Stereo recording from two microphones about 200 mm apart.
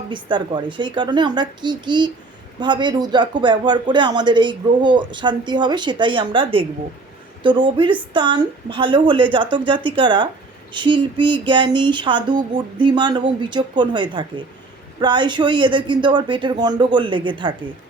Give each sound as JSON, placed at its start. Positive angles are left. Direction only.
{"t": 0.1, "sound": "speech", "side_deg": -20}